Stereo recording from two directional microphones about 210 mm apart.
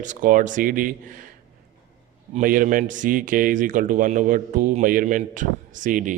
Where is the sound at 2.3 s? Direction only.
40° right (ahead or behind).